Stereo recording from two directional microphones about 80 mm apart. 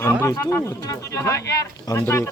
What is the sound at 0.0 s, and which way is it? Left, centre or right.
A man's voice, left.